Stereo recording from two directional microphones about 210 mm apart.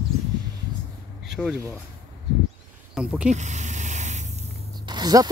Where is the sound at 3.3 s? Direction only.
35° right (ahead or behind).